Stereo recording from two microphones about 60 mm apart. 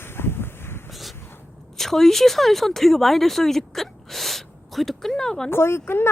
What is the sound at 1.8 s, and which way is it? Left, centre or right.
Speech, centre.